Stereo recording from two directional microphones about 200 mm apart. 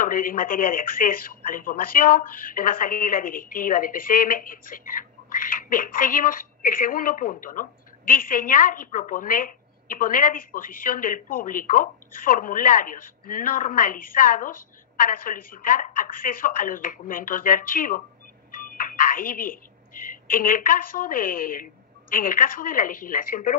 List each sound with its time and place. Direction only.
0.0 s speech: 45° left (ahead or behind)